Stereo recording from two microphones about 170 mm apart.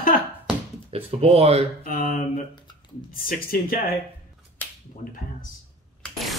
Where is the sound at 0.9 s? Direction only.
35° right (ahead or behind).